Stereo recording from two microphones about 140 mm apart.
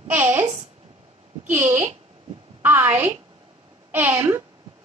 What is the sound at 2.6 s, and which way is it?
A woman's voice, 15° right (ahead or behind).